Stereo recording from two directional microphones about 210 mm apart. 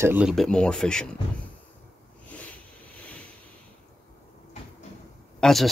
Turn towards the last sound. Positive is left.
turn(degrees=0)  # may be behind; listen again after turning